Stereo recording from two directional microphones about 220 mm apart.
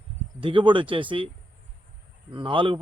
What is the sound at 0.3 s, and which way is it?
Speech, 20° right (ahead or behind).